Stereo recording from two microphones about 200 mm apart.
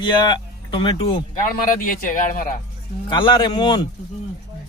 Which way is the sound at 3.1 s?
25° left (ahead or behind).